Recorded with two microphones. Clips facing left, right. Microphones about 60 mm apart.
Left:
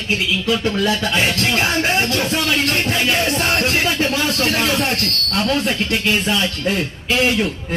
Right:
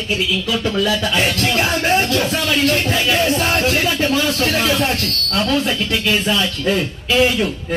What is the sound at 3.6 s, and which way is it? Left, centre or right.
Speech, left.